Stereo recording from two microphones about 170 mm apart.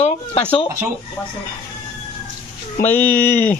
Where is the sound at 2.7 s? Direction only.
10° left (ahead or behind).